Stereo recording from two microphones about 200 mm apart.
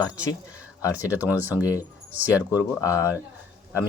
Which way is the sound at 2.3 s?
15° left (ahead or behind).